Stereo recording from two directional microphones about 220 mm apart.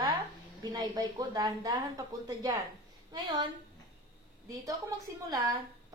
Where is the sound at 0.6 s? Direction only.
20° right (ahead or behind).